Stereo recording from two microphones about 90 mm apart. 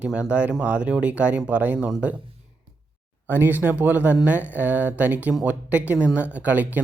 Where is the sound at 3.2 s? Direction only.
25° right (ahead or behind).